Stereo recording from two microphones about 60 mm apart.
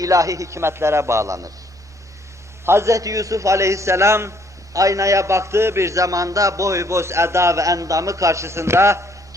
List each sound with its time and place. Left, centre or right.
0.0 s a man's voice: right
2.6 s a man's voice: right
4.7 s a man's voice: right